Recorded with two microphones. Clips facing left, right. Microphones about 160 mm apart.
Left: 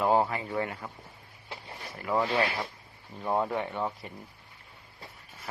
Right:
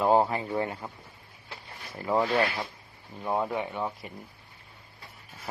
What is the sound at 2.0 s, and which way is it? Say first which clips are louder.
Speech: right 2 dB; 25° right (ahead or behind).